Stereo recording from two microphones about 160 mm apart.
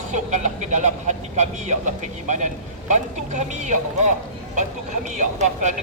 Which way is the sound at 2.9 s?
50° right (ahead or behind).